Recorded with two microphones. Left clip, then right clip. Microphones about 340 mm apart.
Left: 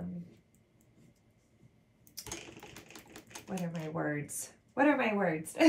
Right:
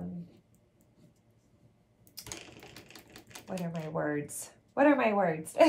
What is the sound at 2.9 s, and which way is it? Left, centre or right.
Typewriter, centre.